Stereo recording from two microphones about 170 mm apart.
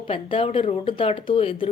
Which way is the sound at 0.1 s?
30° left (ahead or behind).